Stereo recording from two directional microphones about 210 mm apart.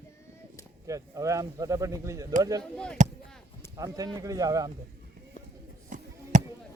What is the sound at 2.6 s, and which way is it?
Speech, 5° left (ahead or behind).